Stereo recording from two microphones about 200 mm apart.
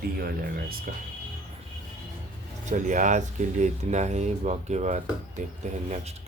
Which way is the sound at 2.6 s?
40° right (ahead or behind).